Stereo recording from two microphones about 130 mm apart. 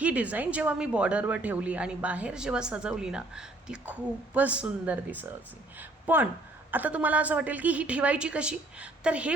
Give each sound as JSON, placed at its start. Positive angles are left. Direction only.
{"t": 0.0, "sound": "a woman's voice", "side_deg": -10}